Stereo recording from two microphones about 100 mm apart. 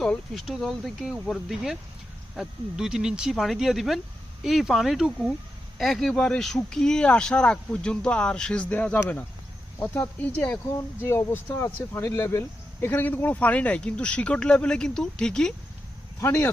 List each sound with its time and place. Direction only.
0.0 s speech: centre (ahead or behind); by 10.6 s 15° left (ahead or behind)
10.8 s speech: 25° left (ahead or behind); by 15.5 s 5° left (ahead or behind)
16.2 s speech: 30° left (ahead or behind)